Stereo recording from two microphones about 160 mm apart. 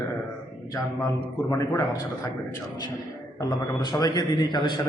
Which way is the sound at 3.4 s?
25° left (ahead or behind).